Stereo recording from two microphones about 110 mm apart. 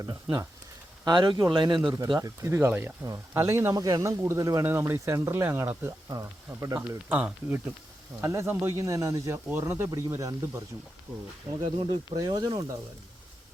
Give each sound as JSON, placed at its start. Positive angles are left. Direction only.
{"t": 0.0, "sound": "speech", "side_deg": -35}
{"t": 7.1, "sound": "speech", "side_deg": -10}
{"t": 8.2, "sound": "speech", "side_deg": -25}
{"t": 12.1, "sound": "speech", "side_deg": -40}